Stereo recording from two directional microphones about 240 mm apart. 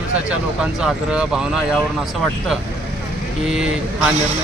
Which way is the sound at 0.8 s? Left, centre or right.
Centre.